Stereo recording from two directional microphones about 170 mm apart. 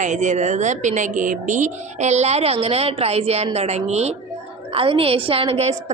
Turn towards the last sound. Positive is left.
turn(degrees=-35)  # may be behind; listen again after turning